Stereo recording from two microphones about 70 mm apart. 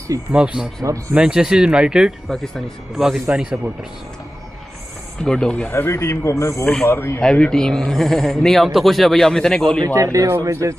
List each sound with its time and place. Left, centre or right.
0.3 s speech: centre
0.8 s speech: right
1.1 s speech: centre
2.3 s speech: centre
5.2 s speech: centre
5.7 s speech: left
7.2 s speech: centre
10.4 s speech: right